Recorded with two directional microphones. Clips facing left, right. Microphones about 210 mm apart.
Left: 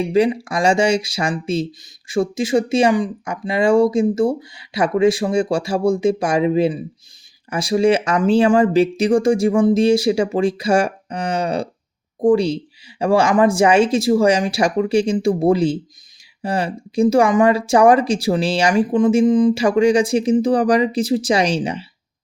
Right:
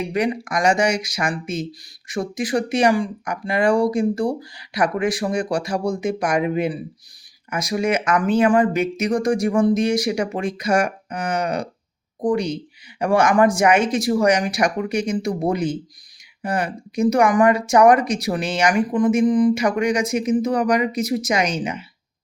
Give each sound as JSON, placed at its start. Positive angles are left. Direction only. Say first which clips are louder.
{"t": 0.1, "sound": "speech", "louder": "left 5 dB", "side_deg": 25}